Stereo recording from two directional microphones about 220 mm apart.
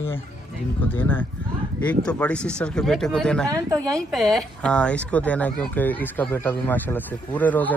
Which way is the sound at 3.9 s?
Centre (ahead or behind).